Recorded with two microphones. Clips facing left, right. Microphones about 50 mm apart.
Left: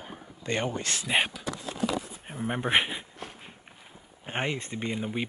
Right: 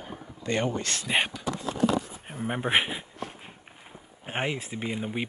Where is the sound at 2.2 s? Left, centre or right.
Centre.